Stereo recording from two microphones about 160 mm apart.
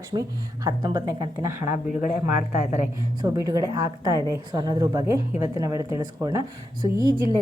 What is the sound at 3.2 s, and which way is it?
A woman's voice, 20° right (ahead or behind).